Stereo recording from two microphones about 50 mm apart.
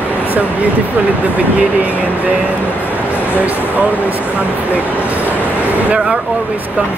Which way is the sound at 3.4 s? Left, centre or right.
Right.